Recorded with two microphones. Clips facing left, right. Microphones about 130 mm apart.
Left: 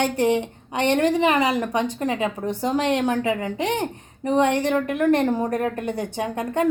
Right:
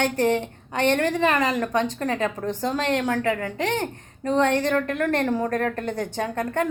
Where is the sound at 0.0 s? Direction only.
15° left (ahead or behind).